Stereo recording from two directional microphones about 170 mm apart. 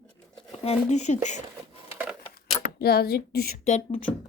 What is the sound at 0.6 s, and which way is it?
Speech, 40° left (ahead or behind).